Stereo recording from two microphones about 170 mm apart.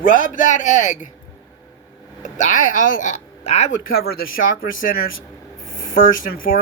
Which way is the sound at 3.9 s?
60° left (ahead or behind).